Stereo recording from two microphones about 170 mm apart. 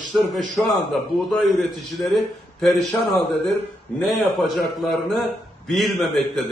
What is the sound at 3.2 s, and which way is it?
Speech, 10° left (ahead or behind).